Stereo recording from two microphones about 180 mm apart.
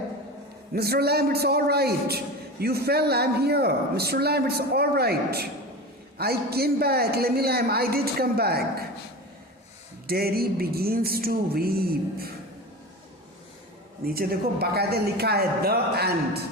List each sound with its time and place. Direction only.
0.7 s a man's voice: 60° right (ahead or behind)
10.1 s a man's voice: 60° right (ahead or behind)
14.1 s a man's voice: 60° right (ahead or behind)